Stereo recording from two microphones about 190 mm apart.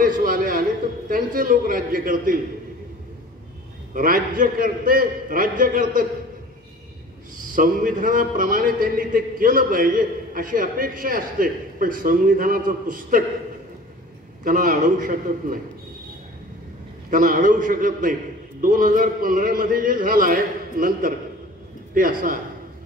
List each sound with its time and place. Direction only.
0.0 s a sound: 45° right (ahead or behind)
3.9 s a man's voice: 45° right (ahead or behind)
7.5 s a man's voice: 45° right (ahead or behind)
14.4 s a man's voice: 45° right (ahead or behind)
17.1 s a man's voice: 45° right (ahead or behind)